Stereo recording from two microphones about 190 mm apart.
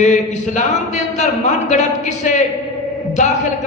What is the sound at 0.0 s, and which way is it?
Speech, 40° left (ahead or behind).